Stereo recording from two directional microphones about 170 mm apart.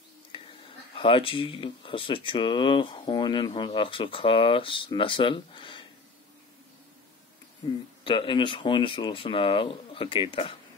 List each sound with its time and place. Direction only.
0.3 s a sound: 30° left (ahead or behind)
0.9 s speech: 30° left (ahead or behind)
8.0 s speech: 30° left (ahead or behind)